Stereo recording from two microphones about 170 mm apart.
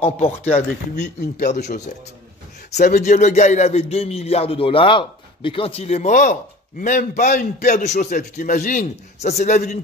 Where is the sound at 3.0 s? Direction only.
40° left (ahead or behind).